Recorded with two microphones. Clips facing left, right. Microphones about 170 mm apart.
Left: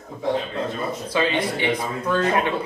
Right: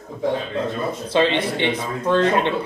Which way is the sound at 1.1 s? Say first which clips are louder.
Right 4 dB; 25° right (ahead or behind).